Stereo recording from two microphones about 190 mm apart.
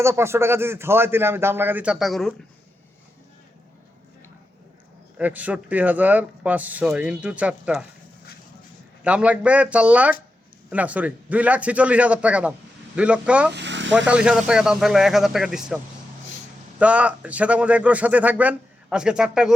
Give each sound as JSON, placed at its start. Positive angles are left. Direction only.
{"t": 0.0, "sound": "speech", "side_deg": -15}
{"t": 5.1, "sound": "speech", "side_deg": -10}
{"t": 9.0, "sound": "speech", "side_deg": -5}
{"t": 13.5, "sound": "speech", "side_deg": -65}
{"t": 14.1, "sound": "speech", "side_deg": -5}